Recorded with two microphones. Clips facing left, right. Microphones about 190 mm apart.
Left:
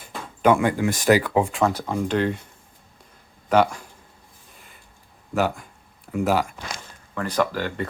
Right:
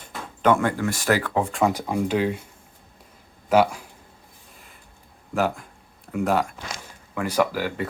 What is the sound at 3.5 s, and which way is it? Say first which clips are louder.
Speech: even; 5° right (ahead or behind).